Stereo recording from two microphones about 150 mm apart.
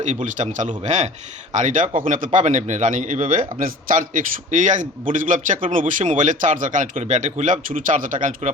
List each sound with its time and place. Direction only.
0.0 s a man's voice: 55° right (ahead or behind)